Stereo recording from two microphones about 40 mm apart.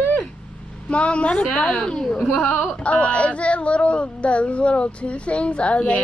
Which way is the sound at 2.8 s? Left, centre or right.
Left.